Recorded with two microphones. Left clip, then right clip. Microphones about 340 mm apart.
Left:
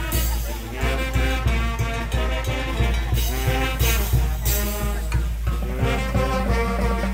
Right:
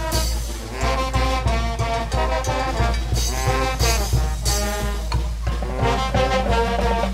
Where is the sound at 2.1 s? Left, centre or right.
Right.